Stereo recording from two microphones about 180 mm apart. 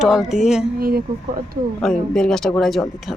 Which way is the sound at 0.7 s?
55° right (ahead or behind).